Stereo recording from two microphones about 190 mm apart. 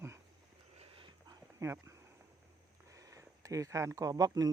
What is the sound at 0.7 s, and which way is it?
Dog, 30° right (ahead or behind).